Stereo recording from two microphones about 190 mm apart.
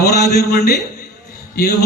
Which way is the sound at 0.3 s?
55° left (ahead or behind).